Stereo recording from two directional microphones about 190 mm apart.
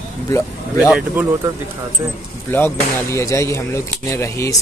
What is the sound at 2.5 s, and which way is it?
Speech, 10° left (ahead or behind).